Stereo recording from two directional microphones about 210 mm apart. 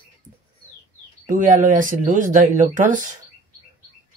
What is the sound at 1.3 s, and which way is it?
Speech, 35° right (ahead or behind).